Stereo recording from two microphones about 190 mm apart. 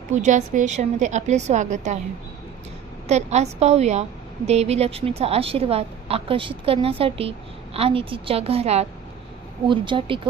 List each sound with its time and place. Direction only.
0.2 s a woman's voice: 40° right (ahead or behind)
3.1 s a woman's voice: 35° right (ahead or behind)